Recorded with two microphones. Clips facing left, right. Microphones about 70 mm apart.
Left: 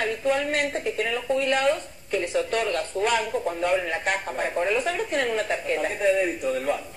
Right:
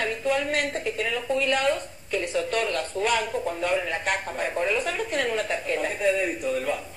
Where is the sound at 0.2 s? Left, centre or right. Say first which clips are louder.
Left 1 dB; left.